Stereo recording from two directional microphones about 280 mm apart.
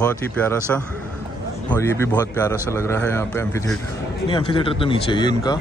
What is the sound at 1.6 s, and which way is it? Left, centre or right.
A man's voice, centre.